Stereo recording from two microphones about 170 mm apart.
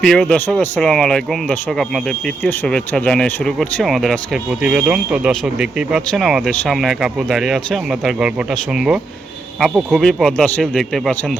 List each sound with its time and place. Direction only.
0.0 s speech: 5° left (ahead or behind)